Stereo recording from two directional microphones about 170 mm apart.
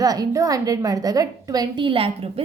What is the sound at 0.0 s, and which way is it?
A woman's voice, 20° right (ahead or behind).